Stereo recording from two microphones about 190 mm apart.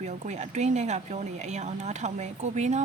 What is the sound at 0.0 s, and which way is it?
Speech, 35° right (ahead or behind).